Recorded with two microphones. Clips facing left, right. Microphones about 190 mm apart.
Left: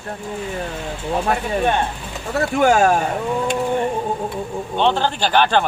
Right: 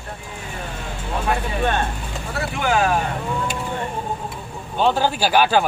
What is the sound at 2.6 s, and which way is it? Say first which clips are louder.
Speech: left 5 dB; 45° left (ahead or behind).